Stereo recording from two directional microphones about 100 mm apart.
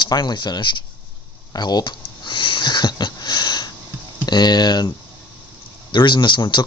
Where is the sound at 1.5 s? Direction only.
45° left (ahead or behind).